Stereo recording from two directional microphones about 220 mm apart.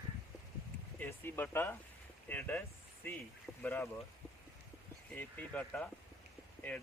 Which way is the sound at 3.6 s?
10° left (ahead or behind).